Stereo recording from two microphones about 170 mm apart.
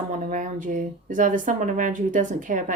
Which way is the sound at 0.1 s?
50° right (ahead or behind).